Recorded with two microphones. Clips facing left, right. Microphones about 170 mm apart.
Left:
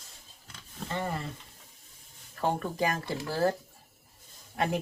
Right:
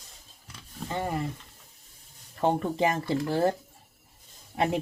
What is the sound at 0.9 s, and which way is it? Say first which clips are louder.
Speech: right 3 dB; 15° right (ahead or behind).